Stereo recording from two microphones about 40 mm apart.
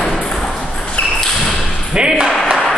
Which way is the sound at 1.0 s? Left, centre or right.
Left.